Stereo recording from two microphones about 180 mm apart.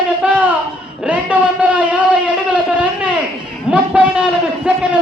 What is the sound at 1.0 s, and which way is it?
A man's voice, 5° right (ahead or behind).